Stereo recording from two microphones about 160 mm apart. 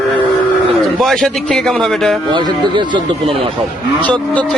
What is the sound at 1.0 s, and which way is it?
Speech, centre (ahead or behind).